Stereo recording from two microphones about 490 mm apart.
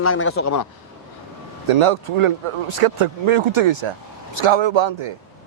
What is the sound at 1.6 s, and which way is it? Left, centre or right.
Speech, right.